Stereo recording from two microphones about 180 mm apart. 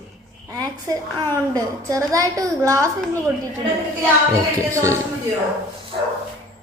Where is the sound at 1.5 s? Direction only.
20° right (ahead or behind).